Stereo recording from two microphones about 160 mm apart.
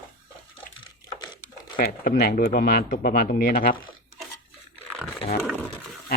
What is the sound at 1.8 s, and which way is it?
Speech, 75° left (ahead or behind).